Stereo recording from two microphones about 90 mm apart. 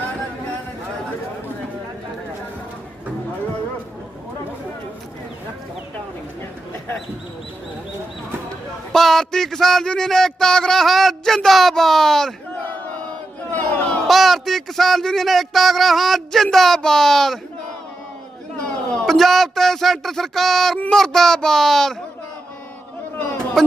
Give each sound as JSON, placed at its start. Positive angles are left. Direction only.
{"t": 8.9, "sound": "a man's voice", "side_deg": 5}
{"t": 12.6, "sound": "battle cry", "side_deg": 20}
{"t": 13.5, "sound": "chatter", "side_deg": 15}
{"t": 14.1, "sound": "a man's voice", "side_deg": 0}
{"t": 18.5, "sound": "a man's voice", "side_deg": 10}
{"t": 23.6, "sound": "a man's voice", "side_deg": 5}